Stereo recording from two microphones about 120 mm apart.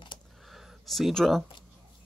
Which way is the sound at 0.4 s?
Centre (ahead or behind).